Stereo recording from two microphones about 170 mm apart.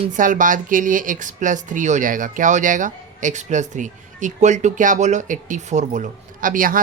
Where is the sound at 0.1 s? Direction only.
50° right (ahead or behind).